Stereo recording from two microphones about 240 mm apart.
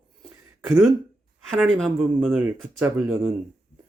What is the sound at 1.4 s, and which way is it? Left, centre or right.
Speech, centre.